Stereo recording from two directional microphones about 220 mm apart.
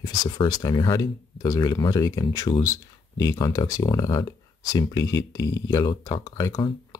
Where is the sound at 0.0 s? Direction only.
20° left (ahead or behind).